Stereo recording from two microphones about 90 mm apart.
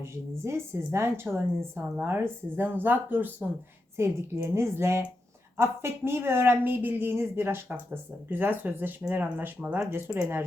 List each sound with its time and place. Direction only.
0.4 s a woman's voice: 30° right (ahead or behind)
10.1 s speech: 30° right (ahead or behind)